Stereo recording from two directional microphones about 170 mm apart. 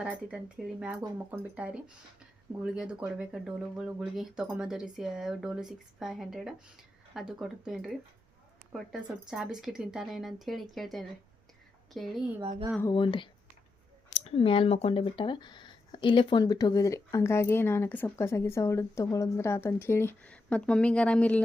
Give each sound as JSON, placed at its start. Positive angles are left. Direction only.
{"t": 0.0, "sound": "speech", "side_deg": -5}
{"t": 12.4, "sound": "speech", "side_deg": -35}
{"t": 12.9, "sound": "speech", "side_deg": 30}
{"t": 14.3, "sound": "speech", "side_deg": 35}